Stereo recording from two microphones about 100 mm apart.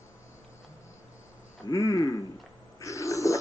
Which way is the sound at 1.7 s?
30° left (ahead or behind).